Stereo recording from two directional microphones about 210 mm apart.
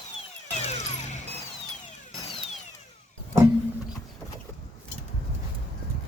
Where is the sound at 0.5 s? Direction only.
30° left (ahead or behind).